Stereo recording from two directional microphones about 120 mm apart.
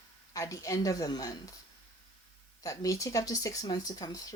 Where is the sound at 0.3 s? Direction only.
25° left (ahead or behind).